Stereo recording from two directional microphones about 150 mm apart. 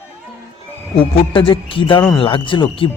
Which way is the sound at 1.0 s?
35° left (ahead or behind).